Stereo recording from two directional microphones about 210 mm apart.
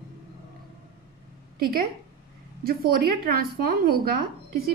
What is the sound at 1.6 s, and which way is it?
Speech, 45° right (ahead or behind).